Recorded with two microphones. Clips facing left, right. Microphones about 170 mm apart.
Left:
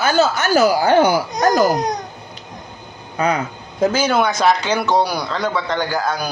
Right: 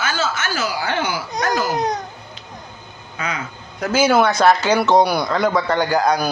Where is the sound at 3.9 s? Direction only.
5° right (ahead or behind).